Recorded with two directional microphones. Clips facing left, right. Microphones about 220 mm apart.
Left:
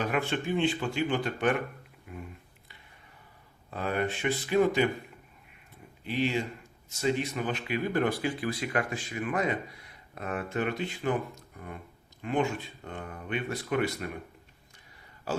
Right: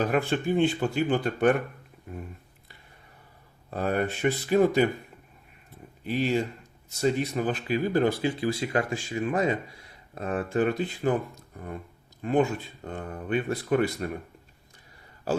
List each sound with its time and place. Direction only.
0.1 s speech: 35° right (ahead or behind)
2.1 s a sound: 35° right (ahead or behind)
3.7 s speech: 40° right (ahead or behind)
6.1 s speech: 40° right (ahead or behind)